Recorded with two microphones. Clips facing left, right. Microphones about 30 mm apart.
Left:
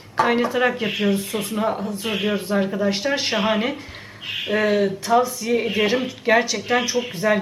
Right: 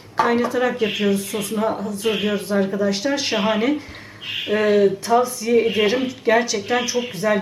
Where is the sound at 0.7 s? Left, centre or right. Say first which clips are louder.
Right 2 dB; centre.